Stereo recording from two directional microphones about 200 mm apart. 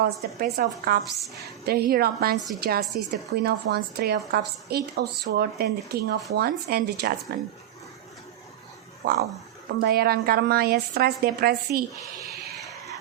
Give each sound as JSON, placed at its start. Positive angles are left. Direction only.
{"t": 0.0, "sound": "speech", "side_deg": -50}
{"t": 9.0, "sound": "speech", "side_deg": -50}